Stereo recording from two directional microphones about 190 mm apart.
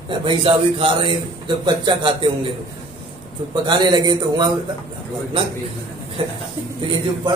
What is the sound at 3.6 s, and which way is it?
Speech, 20° right (ahead or behind).